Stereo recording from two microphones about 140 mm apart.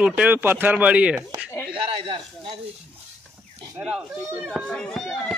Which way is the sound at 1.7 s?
40° right (ahead or behind).